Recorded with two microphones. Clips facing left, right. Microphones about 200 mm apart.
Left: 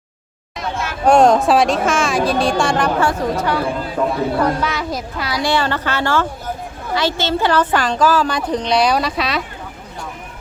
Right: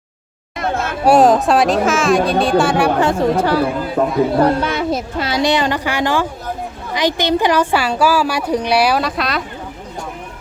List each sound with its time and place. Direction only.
0.5 s a sound: 55° right (ahead or behind)
1.0 s speech: 5° right (ahead or behind)
3.1 s a woman's voice: 30° right (ahead or behind); by 9.4 s centre (ahead or behind)